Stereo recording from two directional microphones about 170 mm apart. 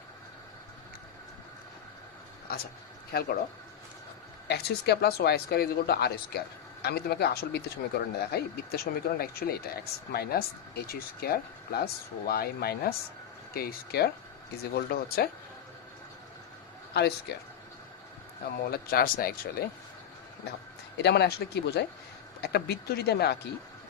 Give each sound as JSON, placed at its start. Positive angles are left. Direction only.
{"t": 2.5, "sound": "speech", "side_deg": 65}
{"t": 4.4, "sound": "speech", "side_deg": 75}
{"t": 16.9, "sound": "speech", "side_deg": 75}
{"t": 18.6, "sound": "speech", "side_deg": 65}
{"t": 21.0, "sound": "speech", "side_deg": 75}